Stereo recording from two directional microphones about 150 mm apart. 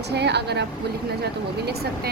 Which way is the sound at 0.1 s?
90° right.